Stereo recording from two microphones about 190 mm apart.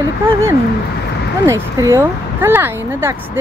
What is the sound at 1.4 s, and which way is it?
Speech, 15° right (ahead or behind).